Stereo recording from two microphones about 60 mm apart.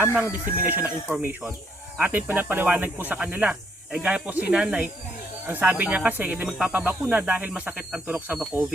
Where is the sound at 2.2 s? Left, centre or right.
Right.